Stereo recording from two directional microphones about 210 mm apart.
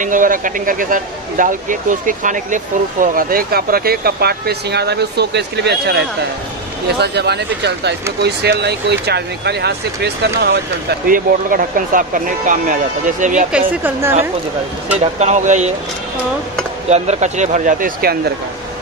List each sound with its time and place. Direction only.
0.0 s speech: 40° right (ahead or behind)
15.0 s speech: 35° right (ahead or behind)
16.9 s speech: 35° right (ahead or behind)